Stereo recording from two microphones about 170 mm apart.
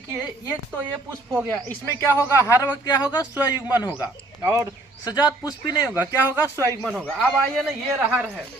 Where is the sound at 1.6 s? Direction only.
15° left (ahead or behind).